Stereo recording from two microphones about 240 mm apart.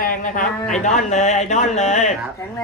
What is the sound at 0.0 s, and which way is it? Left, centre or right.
Speech, left.